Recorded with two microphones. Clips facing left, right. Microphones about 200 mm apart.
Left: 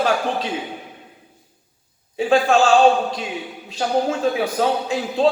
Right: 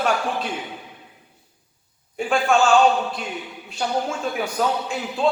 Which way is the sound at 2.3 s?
35° left (ahead or behind).